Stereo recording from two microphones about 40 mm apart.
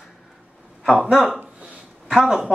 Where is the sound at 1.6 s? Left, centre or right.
Right.